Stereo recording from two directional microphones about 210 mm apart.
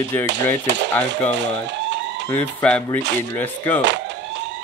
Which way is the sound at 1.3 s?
60° right (ahead or behind).